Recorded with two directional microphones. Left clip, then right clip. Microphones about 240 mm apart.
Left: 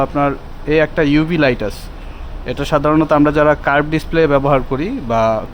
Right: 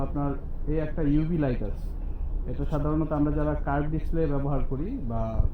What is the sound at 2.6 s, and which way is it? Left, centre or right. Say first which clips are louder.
A man's voice: left 16 dB; left.